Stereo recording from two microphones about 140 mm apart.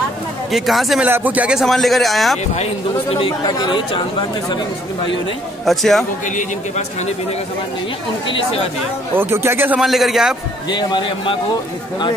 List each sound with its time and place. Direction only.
0.5 s speech: centre (ahead or behind)
1.0 s speech: 10° right (ahead or behind)
2.5 s speech: 45° left (ahead or behind)
5.7 s speech: centre (ahead or behind)
8.3 s speech: 45° left (ahead or behind)
9.1 s speech: 15° right (ahead or behind)
9.8 s speech: centre (ahead or behind)
10.7 s speech: 30° left (ahead or behind)